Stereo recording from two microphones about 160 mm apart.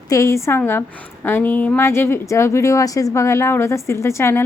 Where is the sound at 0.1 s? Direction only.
20° left (ahead or behind).